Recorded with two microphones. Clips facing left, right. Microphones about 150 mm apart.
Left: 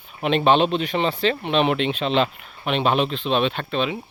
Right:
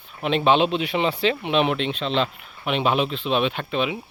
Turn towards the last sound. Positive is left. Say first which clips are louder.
# left 1 dB
turn(degrees=-10)  # may be behind; listen again after turning